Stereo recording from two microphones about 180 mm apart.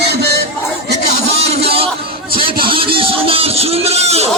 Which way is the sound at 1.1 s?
35° right (ahead or behind).